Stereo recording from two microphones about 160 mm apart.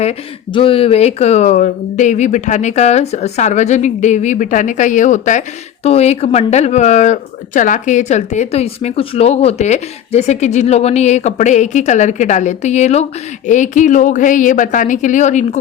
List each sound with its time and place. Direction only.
0.0 s speech: 35° left (ahead or behind)